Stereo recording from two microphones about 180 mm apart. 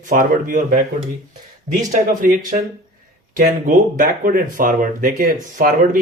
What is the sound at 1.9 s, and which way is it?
Speech, 45° right (ahead or behind).